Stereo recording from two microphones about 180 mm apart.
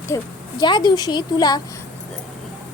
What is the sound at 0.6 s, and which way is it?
A woman's voice, 25° left (ahead or behind).